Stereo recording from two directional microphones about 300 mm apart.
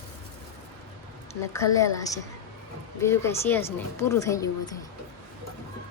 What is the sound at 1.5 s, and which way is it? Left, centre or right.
A woman's voice, centre.